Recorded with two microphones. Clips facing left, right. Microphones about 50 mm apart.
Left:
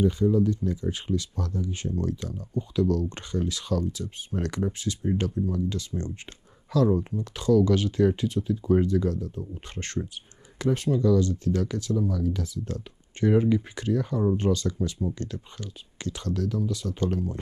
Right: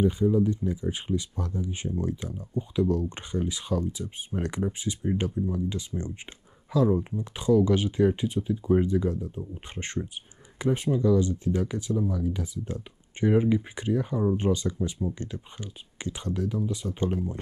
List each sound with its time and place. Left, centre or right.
0.0 s speech: centre